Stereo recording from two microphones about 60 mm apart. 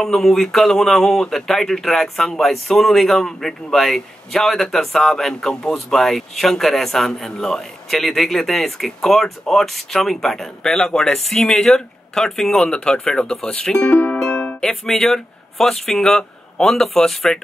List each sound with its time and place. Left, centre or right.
0.0 s speech: centre
13.7 s speech: left
14.1 s music: centre
14.6 s speech: centre